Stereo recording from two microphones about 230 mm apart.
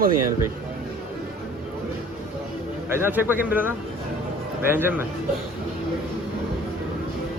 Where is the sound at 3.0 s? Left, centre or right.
Centre.